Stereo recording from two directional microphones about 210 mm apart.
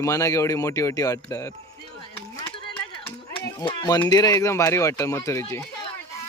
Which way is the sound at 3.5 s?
15° left (ahead or behind).